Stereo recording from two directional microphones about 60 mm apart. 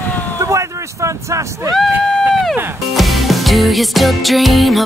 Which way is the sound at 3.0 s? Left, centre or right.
Centre.